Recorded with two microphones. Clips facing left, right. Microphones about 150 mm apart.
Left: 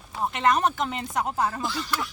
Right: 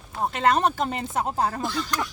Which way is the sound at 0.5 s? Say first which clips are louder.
Right 2 dB; 35° right (ahead or behind).